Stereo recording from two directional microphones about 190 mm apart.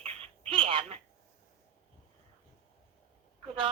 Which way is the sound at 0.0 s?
30° right (ahead or behind).